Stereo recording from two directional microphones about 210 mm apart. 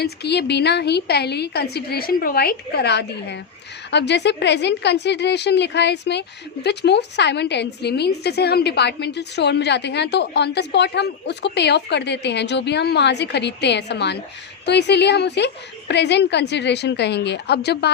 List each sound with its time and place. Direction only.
0.0 s a woman's voice: 50° left (ahead or behind)